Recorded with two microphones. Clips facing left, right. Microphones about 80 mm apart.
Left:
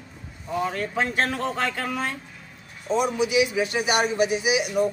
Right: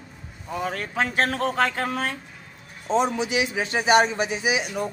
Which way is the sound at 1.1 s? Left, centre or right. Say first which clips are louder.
Right 1 dB; right.